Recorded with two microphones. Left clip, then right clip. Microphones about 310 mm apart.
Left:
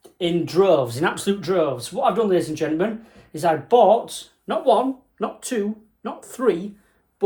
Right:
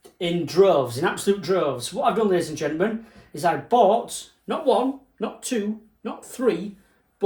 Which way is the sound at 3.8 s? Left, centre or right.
Centre.